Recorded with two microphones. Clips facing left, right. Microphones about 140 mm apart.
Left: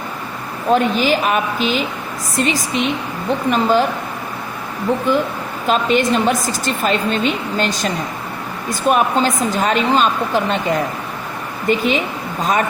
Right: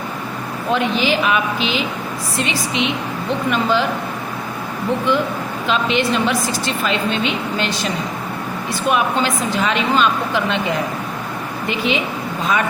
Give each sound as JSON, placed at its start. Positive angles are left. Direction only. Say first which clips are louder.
{"t": 0.7, "sound": "a woman's voice", "louder": "left 3 dB", "side_deg": 45}
{"t": 5.6, "sound": "a woman's voice", "louder": "left 3 dB", "side_deg": 45}
{"t": 11.7, "sound": "a woman's voice", "louder": "left 4 dB", "side_deg": 45}